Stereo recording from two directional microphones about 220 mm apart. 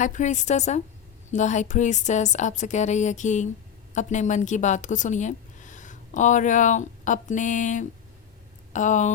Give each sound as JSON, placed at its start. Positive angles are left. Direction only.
{"t": 0.0, "sound": "a woman's voice", "side_deg": 35}